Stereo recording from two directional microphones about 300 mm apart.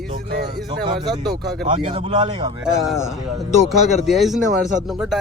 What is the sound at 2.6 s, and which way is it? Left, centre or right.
Speech, centre.